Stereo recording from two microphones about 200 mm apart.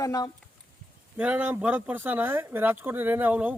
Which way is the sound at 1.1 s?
5° right (ahead or behind).